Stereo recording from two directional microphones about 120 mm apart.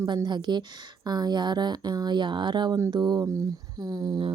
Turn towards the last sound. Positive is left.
turn(degrees=-35)  # may be behind; listen again after turning